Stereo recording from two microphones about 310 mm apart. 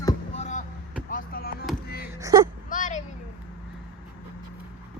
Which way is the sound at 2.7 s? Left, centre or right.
Left.